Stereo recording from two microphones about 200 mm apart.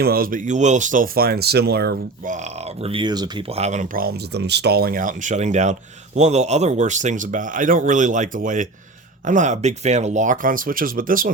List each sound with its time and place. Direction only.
0.0 s speech: 50° right (ahead or behind)
2.8 s speech: 25° right (ahead or behind); by 11.3 s 45° right (ahead or behind)